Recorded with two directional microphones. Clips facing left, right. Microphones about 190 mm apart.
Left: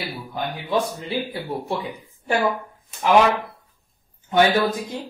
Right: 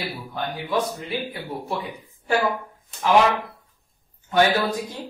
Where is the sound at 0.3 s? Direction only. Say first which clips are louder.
Left 2 dB; 25° left (ahead or behind).